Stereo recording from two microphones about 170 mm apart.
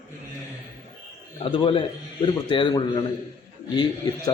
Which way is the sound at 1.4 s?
30° left (ahead or behind).